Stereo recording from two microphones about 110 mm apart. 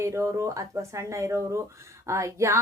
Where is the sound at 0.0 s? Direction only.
25° right (ahead or behind).